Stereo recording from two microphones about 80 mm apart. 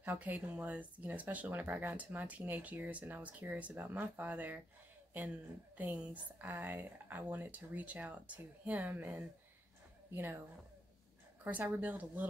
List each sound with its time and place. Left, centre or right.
0.0 s speech: centre
5.8 s speech: right
11.4 s speech: right